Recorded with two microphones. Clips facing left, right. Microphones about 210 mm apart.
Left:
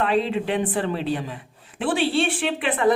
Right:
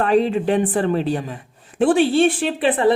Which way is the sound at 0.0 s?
45° right (ahead or behind).